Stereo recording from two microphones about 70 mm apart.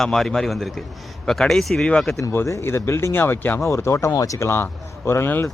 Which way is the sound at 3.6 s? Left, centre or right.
Left.